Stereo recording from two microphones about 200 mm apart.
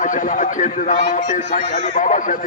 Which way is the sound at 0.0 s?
40° left (ahead or behind).